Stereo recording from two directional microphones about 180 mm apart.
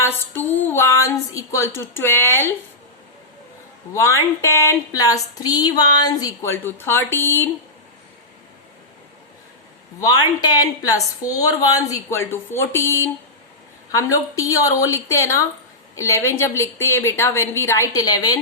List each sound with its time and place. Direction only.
0.0 s speech: 10° left (ahead or behind)
3.9 s speech: 15° left (ahead or behind)
10.0 s a woman's voice: 20° left (ahead or behind)